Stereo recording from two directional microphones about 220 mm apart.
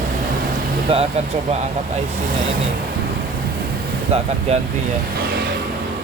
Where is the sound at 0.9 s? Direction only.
25° right (ahead or behind).